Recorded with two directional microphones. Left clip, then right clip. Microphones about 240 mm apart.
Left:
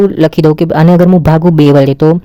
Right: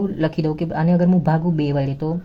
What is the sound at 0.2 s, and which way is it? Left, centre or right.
Speech, left.